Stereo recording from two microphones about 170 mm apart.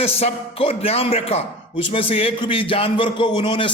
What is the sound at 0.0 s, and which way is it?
Speech, 35° left (ahead or behind).